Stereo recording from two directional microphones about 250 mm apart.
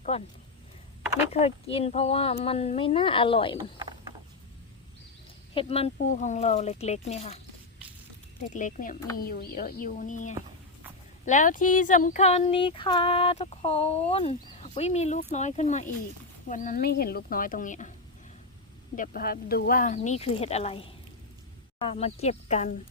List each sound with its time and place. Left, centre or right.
0.1 s speech: left
1.3 s speech: left
5.5 s speech: left
8.5 s speech: left
18.9 s speech: left